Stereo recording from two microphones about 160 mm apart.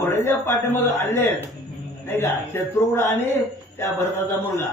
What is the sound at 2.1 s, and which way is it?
Speech, 15° left (ahead or behind).